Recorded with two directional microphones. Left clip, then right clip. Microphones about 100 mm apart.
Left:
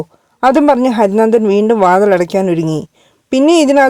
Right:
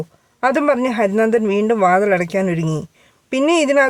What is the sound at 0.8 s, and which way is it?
Speech, 45° left (ahead or behind).